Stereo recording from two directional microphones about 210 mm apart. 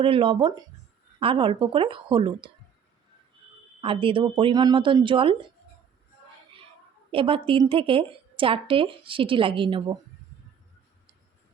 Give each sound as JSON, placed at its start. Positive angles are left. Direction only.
{"t": 0.0, "sound": "a woman's voice", "side_deg": -25}
{"t": 3.8, "sound": "a woman's voice", "side_deg": -25}
{"t": 7.1, "sound": "a woman's voice", "side_deg": -25}